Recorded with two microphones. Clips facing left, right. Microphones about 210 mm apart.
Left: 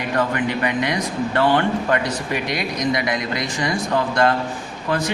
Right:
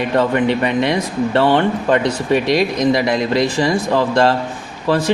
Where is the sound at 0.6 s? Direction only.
25° right (ahead or behind).